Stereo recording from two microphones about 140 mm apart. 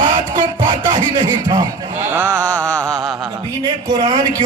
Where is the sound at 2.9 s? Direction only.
5° right (ahead or behind).